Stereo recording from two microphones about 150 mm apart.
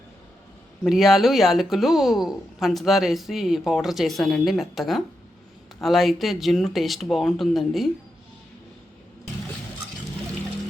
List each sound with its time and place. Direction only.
0.9 s a woman's voice: centre (ahead or behind)